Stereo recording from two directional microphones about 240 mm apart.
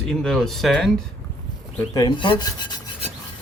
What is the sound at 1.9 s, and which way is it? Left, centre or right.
Rub, centre.